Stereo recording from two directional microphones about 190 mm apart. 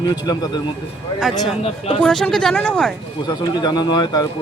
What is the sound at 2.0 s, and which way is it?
Speech, 5° left (ahead or behind).